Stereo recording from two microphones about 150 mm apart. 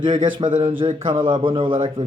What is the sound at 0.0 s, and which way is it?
A man's voice, 30° right (ahead or behind).